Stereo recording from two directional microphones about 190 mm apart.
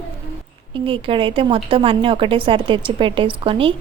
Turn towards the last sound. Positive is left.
turn(degrees=-30)  # may be behind; listen again after turning